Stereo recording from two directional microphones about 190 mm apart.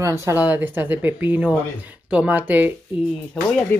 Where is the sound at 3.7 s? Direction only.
10° left (ahead or behind).